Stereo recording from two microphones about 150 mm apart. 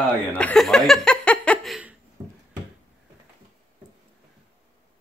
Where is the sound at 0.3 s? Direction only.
10° left (ahead or behind).